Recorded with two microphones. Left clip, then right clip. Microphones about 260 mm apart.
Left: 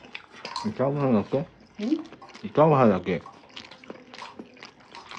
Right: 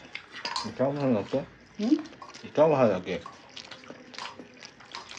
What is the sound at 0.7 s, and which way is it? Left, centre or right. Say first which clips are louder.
Speech: left 3 dB; left.